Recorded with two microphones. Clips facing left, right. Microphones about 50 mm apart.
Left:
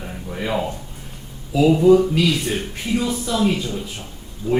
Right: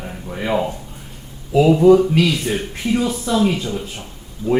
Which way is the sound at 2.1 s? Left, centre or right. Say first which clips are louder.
Right 2 dB; right.